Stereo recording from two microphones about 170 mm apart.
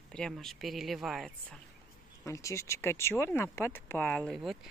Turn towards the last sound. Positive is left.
turn(degrees=0)  # may be behind; listen again after turning